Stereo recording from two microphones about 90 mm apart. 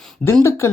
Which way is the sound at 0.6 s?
30° left (ahead or behind).